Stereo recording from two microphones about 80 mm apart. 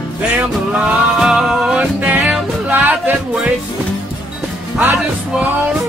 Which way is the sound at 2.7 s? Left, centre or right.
Right.